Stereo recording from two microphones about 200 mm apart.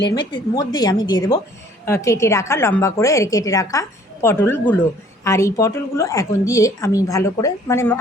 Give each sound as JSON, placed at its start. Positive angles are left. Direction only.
{"t": 0.3, "sound": "a woman's voice", "side_deg": 20}